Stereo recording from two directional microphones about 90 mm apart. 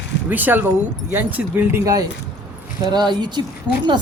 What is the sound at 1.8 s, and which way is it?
Speech, 40° right (ahead or behind).